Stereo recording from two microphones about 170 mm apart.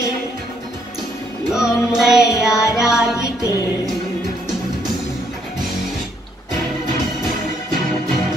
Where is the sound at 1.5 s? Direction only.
5° right (ahead or behind).